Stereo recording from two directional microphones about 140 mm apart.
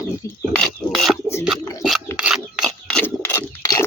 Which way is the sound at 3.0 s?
15° left (ahead or behind).